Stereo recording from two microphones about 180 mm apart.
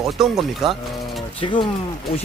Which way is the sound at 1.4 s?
25° left (ahead or behind).